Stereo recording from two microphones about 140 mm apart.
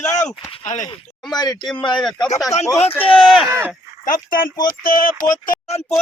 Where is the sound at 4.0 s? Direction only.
80° left.